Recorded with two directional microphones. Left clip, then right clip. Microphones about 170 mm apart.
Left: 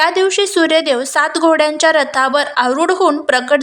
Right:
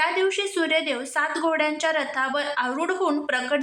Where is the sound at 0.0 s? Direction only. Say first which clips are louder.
Left 10 dB; 40° left (ahead or behind).